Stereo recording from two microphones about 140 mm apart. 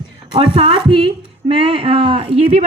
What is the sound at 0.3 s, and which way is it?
A woman's voice, 40° right (ahead or behind).